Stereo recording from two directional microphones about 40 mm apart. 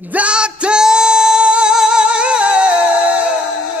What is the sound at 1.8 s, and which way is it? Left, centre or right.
Music, right.